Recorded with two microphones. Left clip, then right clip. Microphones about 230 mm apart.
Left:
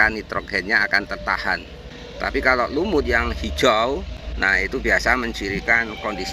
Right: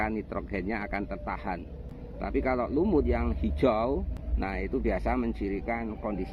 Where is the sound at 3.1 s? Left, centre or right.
Centre.